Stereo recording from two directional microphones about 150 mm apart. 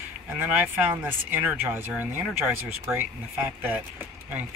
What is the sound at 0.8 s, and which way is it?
Speech, 15° right (ahead or behind).